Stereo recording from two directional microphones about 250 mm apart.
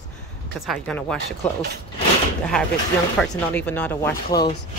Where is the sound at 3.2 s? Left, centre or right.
Centre.